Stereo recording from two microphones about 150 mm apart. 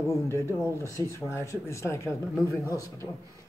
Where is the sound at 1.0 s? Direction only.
25° right (ahead or behind).